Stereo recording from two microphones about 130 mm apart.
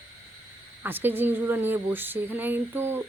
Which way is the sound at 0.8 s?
15° right (ahead or behind).